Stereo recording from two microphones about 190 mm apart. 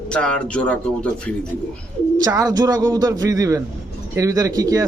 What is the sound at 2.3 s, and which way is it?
A man's voice, 20° right (ahead or behind).